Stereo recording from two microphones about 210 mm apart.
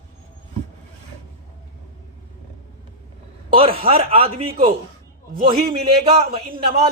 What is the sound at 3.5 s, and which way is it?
Speech, 25° right (ahead or behind).